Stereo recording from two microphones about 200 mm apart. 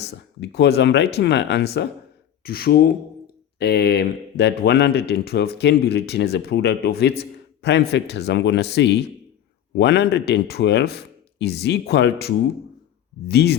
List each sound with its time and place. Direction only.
0.3 s speech: 55° left (ahead or behind)